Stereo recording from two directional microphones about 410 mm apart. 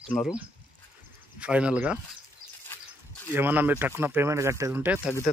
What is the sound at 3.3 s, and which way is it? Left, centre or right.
Speech, centre.